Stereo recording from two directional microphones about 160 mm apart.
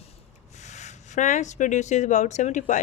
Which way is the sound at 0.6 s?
45° left (ahead or behind).